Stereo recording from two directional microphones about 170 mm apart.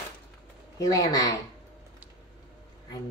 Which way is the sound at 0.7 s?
20° left (ahead or behind).